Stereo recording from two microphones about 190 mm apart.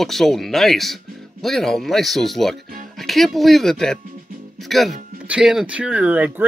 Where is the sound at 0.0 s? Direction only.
Centre (ahead or behind).